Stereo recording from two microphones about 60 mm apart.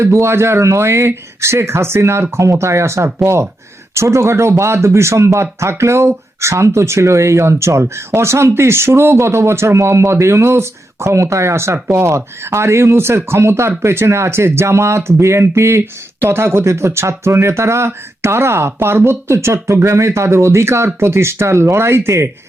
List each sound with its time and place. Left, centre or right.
0.0 s speech: right